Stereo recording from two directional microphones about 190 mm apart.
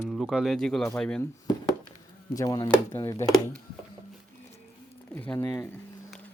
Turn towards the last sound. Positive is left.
turn(degrees=10)  # may be behind; listen again after turning